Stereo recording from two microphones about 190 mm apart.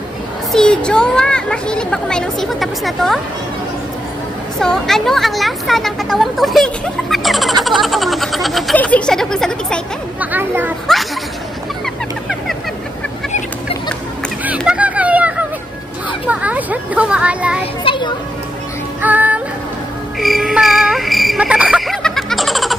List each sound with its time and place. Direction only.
0.5 s speech: 5° left (ahead or behind)
4.6 s speech: centre (ahead or behind)
10.3 s a child's voice: 10° right (ahead or behind)
10.9 s speech: centre (ahead or behind)
11.8 s chicken: centre (ahead or behind)
14.6 s a sound: 5° right (ahead or behind)
16.3 s a child's voice: 5° right (ahead or behind)
17.8 s a sound: 25° left (ahead or behind)
18.9 s child singing: 10° right (ahead or behind)
20.2 s music: centre (ahead or behind)